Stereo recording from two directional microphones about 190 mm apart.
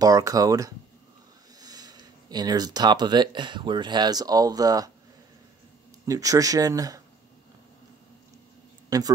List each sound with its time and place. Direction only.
0.0 s speech: 20° right (ahead or behind)
6.0 s speech: 20° right (ahead or behind)
8.9 s a man's voice: 20° right (ahead or behind)